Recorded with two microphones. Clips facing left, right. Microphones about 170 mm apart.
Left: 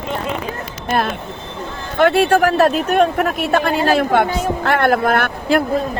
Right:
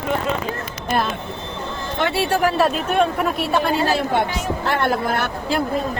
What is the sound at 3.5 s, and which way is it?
Speech, 55° left (ahead or behind).